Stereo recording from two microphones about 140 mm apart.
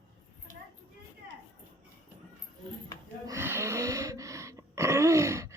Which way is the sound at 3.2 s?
20° right (ahead or behind).